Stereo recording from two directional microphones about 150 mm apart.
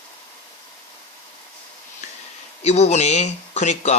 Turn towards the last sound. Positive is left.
turn(degrees=50)  # may be behind; listen again after turning